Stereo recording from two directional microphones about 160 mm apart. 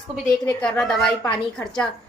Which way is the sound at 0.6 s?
5° left (ahead or behind).